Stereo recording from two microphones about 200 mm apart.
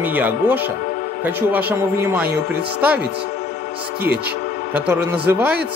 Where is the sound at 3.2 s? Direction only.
50° left (ahead or behind).